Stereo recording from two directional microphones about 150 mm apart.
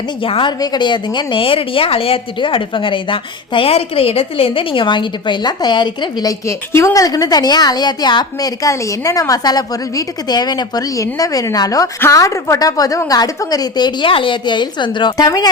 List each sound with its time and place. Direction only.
0.2 s speech: 35° left (ahead or behind)